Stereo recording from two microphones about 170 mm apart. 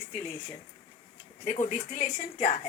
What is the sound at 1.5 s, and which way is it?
A woman's voice, 45° left (ahead or behind).